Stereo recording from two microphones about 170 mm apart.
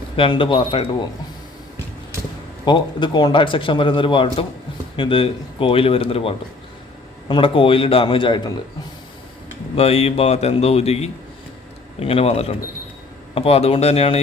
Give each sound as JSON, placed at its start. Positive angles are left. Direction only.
{"t": 0.2, "sound": "speech", "side_deg": 30}
{"t": 2.6, "sound": "a man's voice", "side_deg": 25}
{"t": 9.7, "sound": "speech", "side_deg": 35}